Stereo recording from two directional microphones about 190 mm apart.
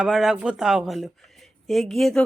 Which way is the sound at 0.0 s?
Centre (ahead or behind).